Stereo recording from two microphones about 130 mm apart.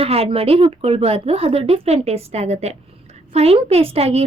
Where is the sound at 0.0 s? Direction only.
50° right (ahead or behind).